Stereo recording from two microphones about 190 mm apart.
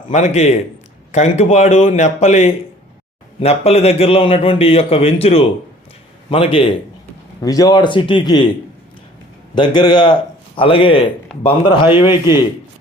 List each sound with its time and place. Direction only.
0.1 s a man's voice: 35° left (ahead or behind)
9.6 s a man's voice: 25° left (ahead or behind)